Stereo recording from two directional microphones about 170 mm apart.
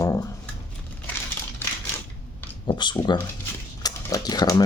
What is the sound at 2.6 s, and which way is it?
Speech, 25° left (ahead or behind).